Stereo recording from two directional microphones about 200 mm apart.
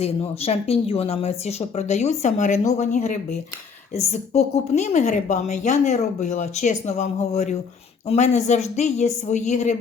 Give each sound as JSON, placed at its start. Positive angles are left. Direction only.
{"t": 0.0, "sound": "a woman's voice", "side_deg": 30}